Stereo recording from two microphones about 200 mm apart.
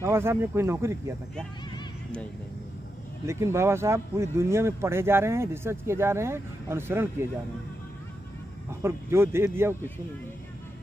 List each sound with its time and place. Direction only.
0.0 s speech: 10° right (ahead or behind)
3.3 s speech: 15° right (ahead or behind)
8.8 s speech: 10° right (ahead or behind)